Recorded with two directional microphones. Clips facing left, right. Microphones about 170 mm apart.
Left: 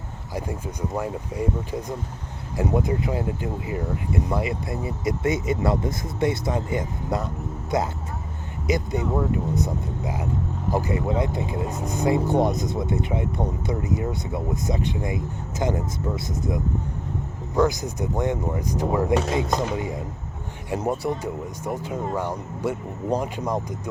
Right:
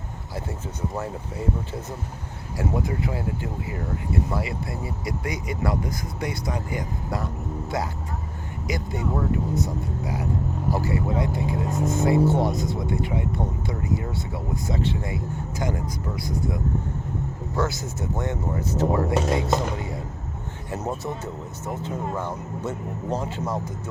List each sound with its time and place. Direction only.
0.3 s speech: 15° left (ahead or behind)
20.7 s speech: 10° left (ahead or behind)